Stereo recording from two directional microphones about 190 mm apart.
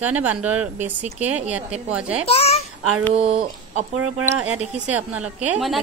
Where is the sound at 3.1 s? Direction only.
30° right (ahead or behind).